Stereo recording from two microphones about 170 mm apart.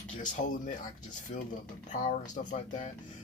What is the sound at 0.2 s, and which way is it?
Speech, 50° left (ahead or behind).